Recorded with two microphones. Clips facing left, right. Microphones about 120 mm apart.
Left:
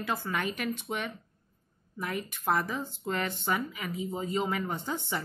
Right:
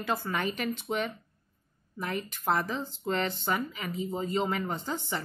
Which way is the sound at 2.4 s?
5° left (ahead or behind).